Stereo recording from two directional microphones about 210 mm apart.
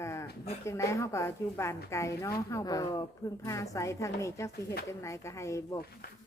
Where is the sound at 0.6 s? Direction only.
15° left (ahead or behind).